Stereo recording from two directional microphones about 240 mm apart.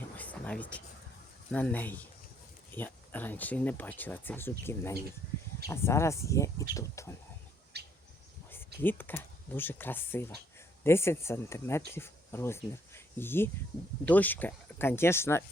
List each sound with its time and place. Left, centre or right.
0.2 s a sound: centre
1.5 s speech: centre
7.7 s bird: right
8.4 s speech: centre